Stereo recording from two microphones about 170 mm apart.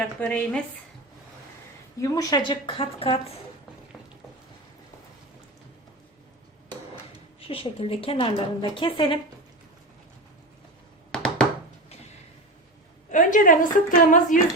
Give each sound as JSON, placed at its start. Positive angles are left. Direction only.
{"t": 0.2, "sound": "a woman's voice", "side_deg": 5}
{"t": 2.0, "sound": "a woman's voice", "side_deg": 20}
{"t": 7.4, "sound": "a woman's voice", "side_deg": 35}
{"t": 11.1, "sound": "a sound", "side_deg": 5}
{"t": 13.1, "sound": "a woman's voice", "side_deg": 50}